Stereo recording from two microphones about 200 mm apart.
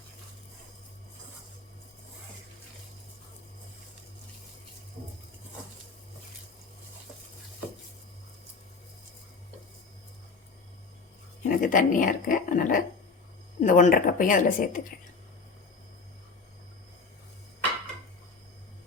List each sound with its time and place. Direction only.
11.4 s a woman's voice: 45° left (ahead or behind)